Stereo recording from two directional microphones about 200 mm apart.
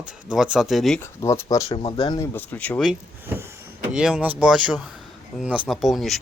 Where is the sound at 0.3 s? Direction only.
5° right (ahead or behind).